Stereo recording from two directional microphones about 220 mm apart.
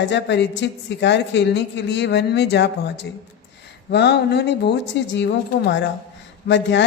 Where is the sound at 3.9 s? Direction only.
50° left (ahead or behind).